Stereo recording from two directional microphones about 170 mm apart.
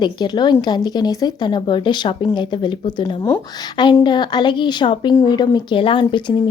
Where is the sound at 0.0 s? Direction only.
25° left (ahead or behind).